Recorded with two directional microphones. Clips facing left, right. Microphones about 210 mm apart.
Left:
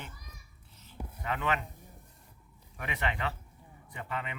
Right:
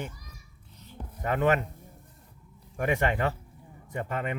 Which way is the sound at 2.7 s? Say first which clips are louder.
Right 9 dB; 45° right (ahead or behind).